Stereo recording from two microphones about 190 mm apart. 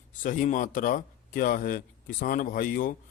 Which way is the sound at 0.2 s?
45° left (ahead or behind).